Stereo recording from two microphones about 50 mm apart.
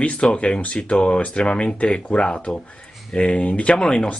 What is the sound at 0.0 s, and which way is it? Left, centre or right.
Speech, left.